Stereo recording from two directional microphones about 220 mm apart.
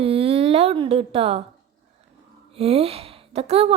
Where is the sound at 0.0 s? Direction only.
25° right (ahead or behind).